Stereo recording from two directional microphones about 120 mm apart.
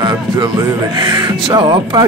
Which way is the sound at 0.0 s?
30° right (ahead or behind).